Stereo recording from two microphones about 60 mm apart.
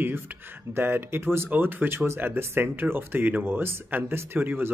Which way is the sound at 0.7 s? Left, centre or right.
Right.